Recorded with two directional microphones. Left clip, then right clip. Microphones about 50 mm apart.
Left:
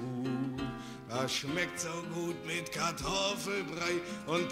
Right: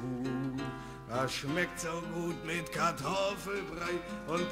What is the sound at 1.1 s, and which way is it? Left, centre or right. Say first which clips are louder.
Music: even; left.